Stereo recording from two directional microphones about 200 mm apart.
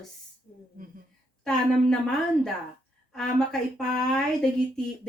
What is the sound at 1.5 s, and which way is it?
A woman's voice, 5° left (ahead or behind).